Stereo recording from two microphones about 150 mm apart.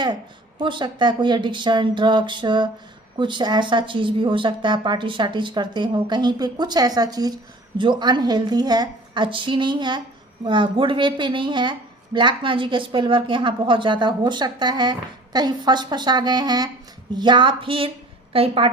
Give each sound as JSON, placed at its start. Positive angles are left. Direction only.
{"t": 0.6, "sound": "speech", "side_deg": -30}